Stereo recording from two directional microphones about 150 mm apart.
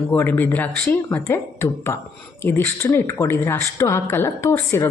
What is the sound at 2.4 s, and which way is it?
A woman's voice, 15° left (ahead or behind).